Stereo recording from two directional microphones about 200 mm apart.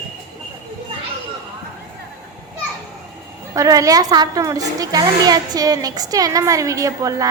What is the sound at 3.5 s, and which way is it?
A child's voice, 15° right (ahead or behind).